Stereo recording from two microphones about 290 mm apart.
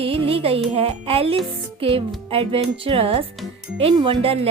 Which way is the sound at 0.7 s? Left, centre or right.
Centre.